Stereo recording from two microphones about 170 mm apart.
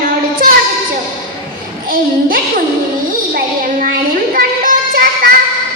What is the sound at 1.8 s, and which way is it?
Child singing, 55° right (ahead or behind).